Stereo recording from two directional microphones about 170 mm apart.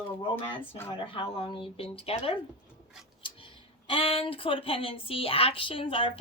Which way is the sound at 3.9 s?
35° left (ahead or behind).